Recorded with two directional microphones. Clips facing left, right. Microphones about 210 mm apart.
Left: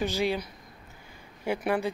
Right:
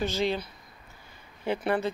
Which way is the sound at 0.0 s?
15° left (ahead or behind).